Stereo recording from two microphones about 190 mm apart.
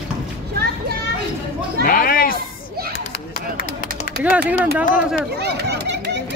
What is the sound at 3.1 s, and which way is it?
Chop, 60° left (ahead or behind).